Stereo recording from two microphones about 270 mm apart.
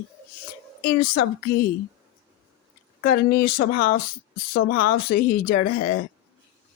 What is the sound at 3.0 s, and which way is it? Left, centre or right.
Speech, left.